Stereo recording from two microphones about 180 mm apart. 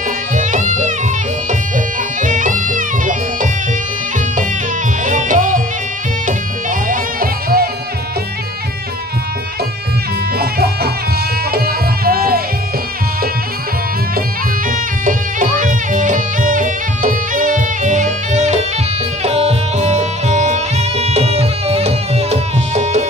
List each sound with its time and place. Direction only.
0.3 s music: 45° right (ahead or behind)
2.2 s music: 45° right (ahead or behind)
5.0 s music: 45° right (ahead or behind)
10.4 s music: 60° right (ahead or behind)
14.7 s music: 45° right (ahead or behind)